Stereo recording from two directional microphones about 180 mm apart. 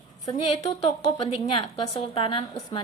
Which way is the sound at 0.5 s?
35° left (ahead or behind).